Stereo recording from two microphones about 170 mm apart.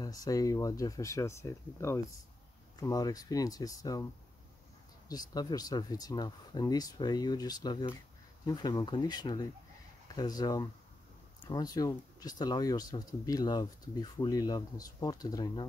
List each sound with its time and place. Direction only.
0.0 s speech: 20° left (ahead or behind)
5.0 s speech: 20° left (ahead or behind)